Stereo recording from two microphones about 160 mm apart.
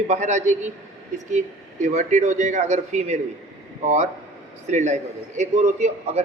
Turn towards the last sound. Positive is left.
turn(degrees=-45)  # may be behind; listen again after turning